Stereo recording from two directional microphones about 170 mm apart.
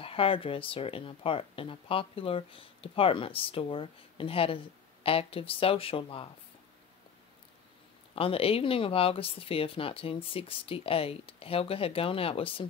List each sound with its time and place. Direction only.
0.0 s speech: 35° left (ahead or behind)
8.1 s speech: 35° left (ahead or behind)